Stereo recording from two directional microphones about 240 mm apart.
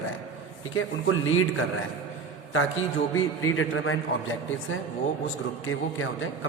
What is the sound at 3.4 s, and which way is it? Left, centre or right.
A man's voice, left.